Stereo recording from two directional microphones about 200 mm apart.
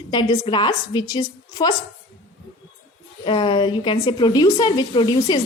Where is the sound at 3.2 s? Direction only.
25° left (ahead or behind).